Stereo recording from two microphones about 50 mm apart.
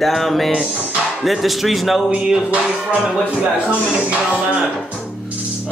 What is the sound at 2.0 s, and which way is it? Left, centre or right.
Speech, right.